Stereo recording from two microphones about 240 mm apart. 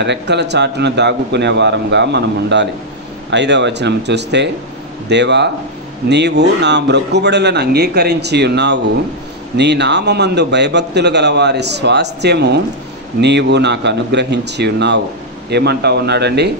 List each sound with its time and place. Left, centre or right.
0.0 s a man's voice: right